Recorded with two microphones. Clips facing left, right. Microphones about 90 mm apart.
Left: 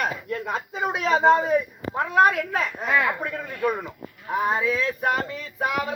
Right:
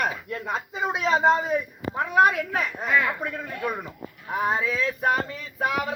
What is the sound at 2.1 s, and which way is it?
A woman's voice, 15° right (ahead or behind).